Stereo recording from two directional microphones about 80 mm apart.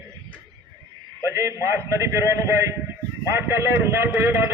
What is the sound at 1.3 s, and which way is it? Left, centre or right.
Speech, right.